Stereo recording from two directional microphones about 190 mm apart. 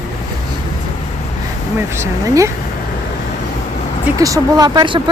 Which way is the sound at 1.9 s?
15° right (ahead or behind).